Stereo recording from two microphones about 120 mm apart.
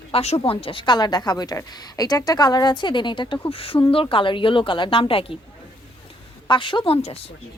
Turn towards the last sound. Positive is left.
turn(degrees=60)  # may be behind; listen again after turning